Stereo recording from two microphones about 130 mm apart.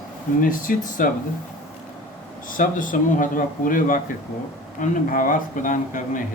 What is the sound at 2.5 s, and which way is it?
Speech, 90° left.